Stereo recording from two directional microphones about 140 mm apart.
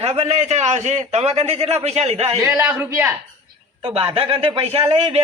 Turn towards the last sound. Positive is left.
turn(degrees=-45)  # may be behind; listen again after turning